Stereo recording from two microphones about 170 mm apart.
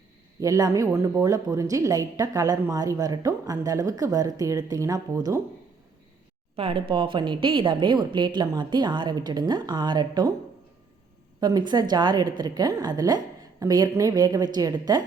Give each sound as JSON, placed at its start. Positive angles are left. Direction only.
{"t": 0.3, "sound": "a woman's voice", "side_deg": -20}
{"t": 6.6, "sound": "a woman's voice", "side_deg": -30}
{"t": 11.3, "sound": "a woman's voice", "side_deg": -25}